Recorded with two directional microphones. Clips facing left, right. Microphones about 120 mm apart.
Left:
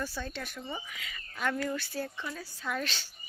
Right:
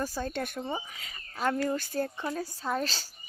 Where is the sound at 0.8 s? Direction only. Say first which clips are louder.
Right 1 dB; 35° right (ahead or behind).